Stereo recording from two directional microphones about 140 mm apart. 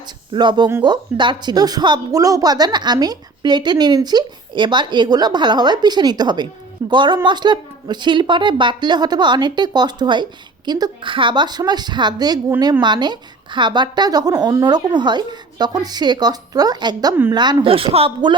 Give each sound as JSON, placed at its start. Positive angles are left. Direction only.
{"t": 0.3, "sound": "a woman's voice", "side_deg": -30}